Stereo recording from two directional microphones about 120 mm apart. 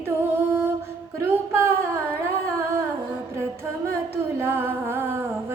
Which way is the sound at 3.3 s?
20° right (ahead or behind).